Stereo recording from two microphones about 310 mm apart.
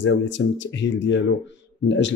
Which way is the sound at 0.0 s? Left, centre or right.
Left.